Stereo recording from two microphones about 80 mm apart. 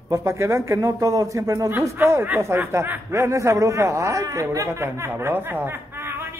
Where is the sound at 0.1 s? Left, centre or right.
Right.